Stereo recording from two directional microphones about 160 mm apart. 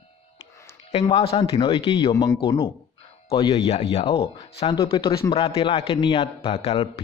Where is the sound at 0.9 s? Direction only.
40° left (ahead or behind).